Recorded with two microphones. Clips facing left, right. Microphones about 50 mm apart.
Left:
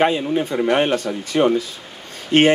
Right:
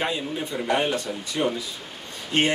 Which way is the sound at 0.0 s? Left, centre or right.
Left.